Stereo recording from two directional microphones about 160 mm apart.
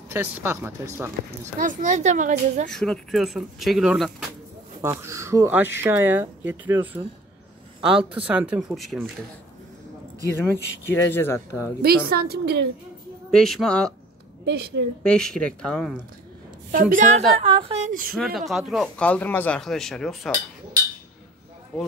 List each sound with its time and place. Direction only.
0.1 s speech: 15° right (ahead or behind)
1.6 s a child's voice: 55° right (ahead or behind)
2.7 s speech: 5° left (ahead or behind)
5.0 s speech: 20° right (ahead or behind); by 9.0 s centre (ahead or behind)
10.4 s speech: 15° left (ahead or behind)
11.8 s a woman's voice: 75° right (ahead or behind)
13.3 s speech: 5° left (ahead or behind)
14.4 s a woman's voice: 90° right
15.0 s speech: 5° left (ahead or behind)
16.7 s a woman's voice: 60° right (ahead or behind)
17.4 s a woman's voice: 35° right (ahead or behind)
18.1 s speech: centre (ahead or behind)
19.0 s speech: 10° left (ahead or behind)